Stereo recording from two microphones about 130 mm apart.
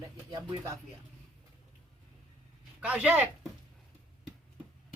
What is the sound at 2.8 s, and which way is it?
Speech, 10° right (ahead or behind).